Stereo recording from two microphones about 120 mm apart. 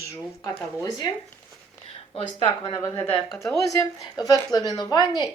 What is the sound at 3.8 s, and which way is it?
A woman's voice, 30° left (ahead or behind).